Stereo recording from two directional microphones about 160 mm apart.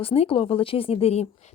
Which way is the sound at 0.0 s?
35° left (ahead or behind).